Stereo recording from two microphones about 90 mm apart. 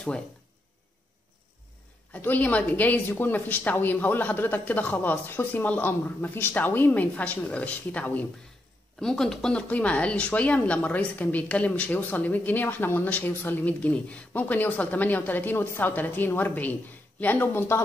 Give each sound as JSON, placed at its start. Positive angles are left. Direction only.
{"t": 2.1, "sound": "speech", "side_deg": 20}
{"t": 9.0, "sound": "speech", "side_deg": 5}